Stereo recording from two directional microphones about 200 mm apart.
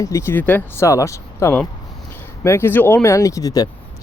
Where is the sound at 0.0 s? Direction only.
15° left (ahead or behind).